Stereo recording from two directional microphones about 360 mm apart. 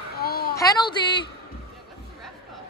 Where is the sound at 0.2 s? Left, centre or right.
Left.